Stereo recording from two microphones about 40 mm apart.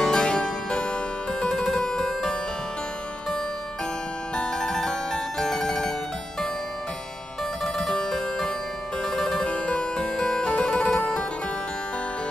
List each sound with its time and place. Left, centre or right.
0.0 s harpsichord: centre
1.4 s music: centre
4.4 s harpsichord: centre
7.9 s music: centre
9.0 s harpsichord: centre
9.5 s harpsichord: left
10.1 s music: centre